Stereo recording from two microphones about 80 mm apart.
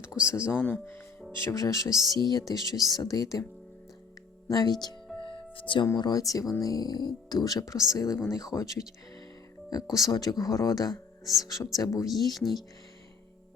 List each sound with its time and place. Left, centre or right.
0.2 s speech: left
0.5 s speech: centre
1.4 s speech: left
2.1 s speech: left
4.4 s speech: left
5.2 s music: left
6.0 s speech: left
9.9 s speech: left
12.0 s speech: centre